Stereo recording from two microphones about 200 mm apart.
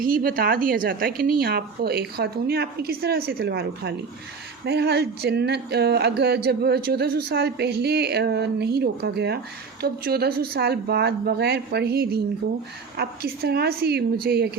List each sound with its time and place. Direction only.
0.0 s speech: 45° right (ahead or behind)